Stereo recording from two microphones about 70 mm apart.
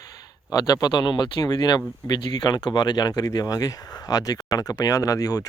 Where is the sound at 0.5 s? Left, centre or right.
Left.